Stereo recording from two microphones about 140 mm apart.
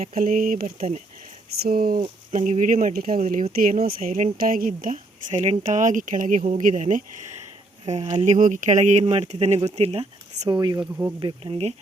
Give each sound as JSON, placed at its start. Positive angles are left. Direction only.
{"t": 0.1, "sound": "speech", "side_deg": -80}
{"t": 1.6, "sound": "speech", "side_deg": -90}
{"t": 2.3, "sound": "speech", "side_deg": -65}
{"t": 3.5, "sound": "speech", "side_deg": -90}
{"t": 5.4, "sound": "speech", "side_deg": -55}
{"t": 10.8, "sound": "speech", "side_deg": -15}
{"t": 11.2, "sound": "speech", "side_deg": -30}